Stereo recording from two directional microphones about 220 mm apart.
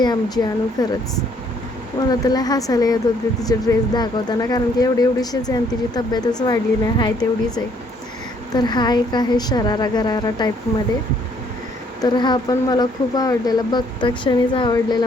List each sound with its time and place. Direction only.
0.0 s speech: 20° left (ahead or behind)
2.0 s speech: 15° left (ahead or behind)
12.0 s speech: 20° left (ahead or behind)